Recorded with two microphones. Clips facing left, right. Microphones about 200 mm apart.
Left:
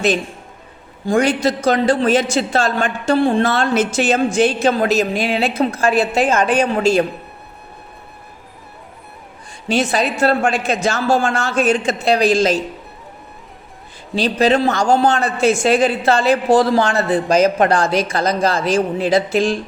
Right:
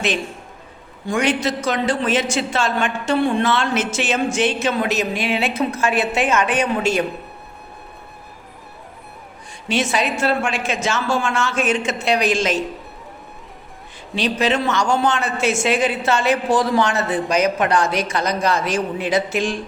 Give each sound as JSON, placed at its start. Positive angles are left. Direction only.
{"t": 1.0, "sound": "speech", "side_deg": 35}
{"t": 9.6, "sound": "speech", "side_deg": 35}
{"t": 14.2, "sound": "speech", "side_deg": 35}